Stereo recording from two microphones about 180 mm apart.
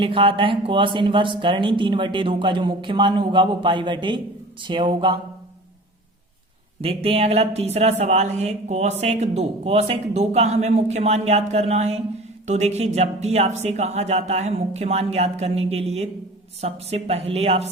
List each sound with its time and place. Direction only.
0.0 s speech: 30° right (ahead or behind)
6.8 s speech: 35° right (ahead or behind)